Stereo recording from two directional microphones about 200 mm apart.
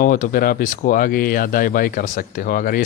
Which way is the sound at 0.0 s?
40° left (ahead or behind).